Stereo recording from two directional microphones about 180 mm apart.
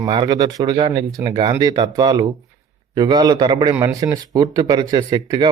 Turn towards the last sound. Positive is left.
turn(degrees=-20)  # may be behind; listen again after turning